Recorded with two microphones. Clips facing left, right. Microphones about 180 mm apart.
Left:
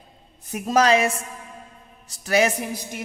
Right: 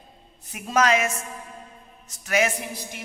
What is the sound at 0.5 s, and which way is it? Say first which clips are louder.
A woman's voice: left 3 dB; 35° left (ahead or behind).